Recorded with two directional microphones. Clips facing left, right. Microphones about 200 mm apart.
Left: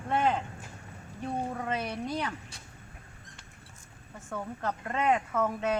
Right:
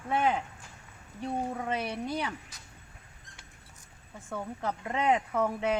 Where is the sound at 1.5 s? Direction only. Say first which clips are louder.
Even; 10° right (ahead or behind).